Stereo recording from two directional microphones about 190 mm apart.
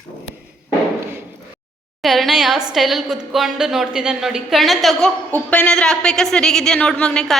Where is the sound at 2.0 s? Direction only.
Centre (ahead or behind).